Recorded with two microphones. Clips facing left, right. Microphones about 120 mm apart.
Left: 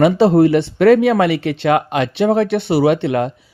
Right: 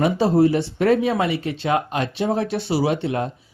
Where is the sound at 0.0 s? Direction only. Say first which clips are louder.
Left 6 dB; 70° left (ahead or behind).